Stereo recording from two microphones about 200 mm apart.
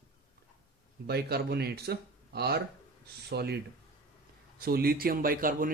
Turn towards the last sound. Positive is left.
turn(degrees=-45)  # may be behind; listen again after turning